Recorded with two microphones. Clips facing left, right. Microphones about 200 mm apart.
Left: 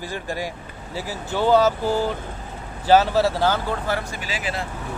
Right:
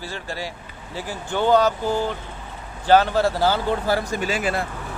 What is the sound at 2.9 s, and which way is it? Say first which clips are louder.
Speech: even; 5° left (ahead or behind).